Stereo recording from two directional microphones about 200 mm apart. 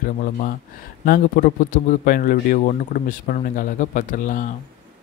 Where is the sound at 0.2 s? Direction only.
40° left (ahead or behind).